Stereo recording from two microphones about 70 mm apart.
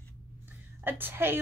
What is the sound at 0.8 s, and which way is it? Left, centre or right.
Speech, right.